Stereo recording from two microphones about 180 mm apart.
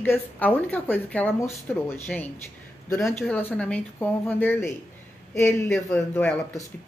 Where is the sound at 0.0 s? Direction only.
10° left (ahead or behind).